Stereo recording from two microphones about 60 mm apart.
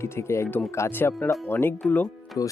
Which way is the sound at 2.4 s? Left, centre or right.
Left.